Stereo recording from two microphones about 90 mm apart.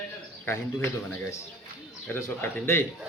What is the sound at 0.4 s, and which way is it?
A man's voice, 25° left (ahead or behind).